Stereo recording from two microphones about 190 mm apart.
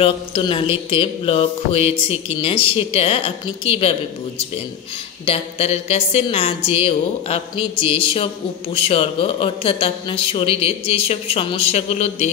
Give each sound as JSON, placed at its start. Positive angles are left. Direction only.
{"t": 0.0, "sound": "a woman's voice", "side_deg": 30}
{"t": 5.2, "sound": "a woman's voice", "side_deg": 30}